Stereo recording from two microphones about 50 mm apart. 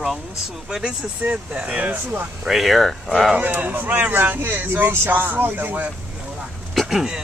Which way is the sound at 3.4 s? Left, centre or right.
Right.